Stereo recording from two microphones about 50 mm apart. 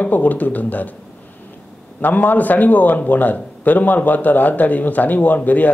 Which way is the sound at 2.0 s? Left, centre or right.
Left.